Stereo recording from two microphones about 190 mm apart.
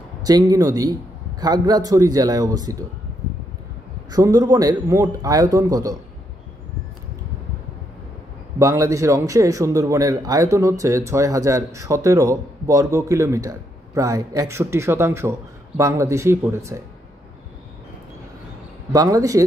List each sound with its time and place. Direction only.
0.2 s a man's voice: 20° right (ahead or behind)
4.1 s a man's voice: 20° right (ahead or behind)
8.5 s a man's voice: 15° right (ahead or behind)
18.9 s a man's voice: 20° right (ahead or behind)